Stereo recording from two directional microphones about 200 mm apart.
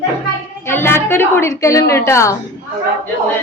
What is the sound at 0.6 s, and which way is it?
A woman's voice, 10° left (ahead or behind).